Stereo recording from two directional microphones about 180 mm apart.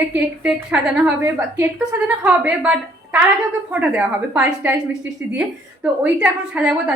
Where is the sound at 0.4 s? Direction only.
10° right (ahead or behind).